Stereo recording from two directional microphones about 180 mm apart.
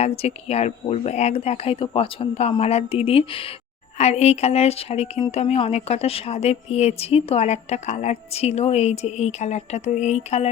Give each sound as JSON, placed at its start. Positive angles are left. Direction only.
{"t": 0.0, "sound": "a woman's voice", "side_deg": 35}